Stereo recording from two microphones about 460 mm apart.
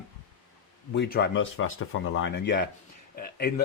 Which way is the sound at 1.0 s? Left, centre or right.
Left.